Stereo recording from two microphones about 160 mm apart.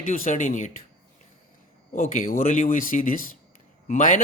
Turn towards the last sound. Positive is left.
turn(degrees=50)  # may be behind; listen again after turning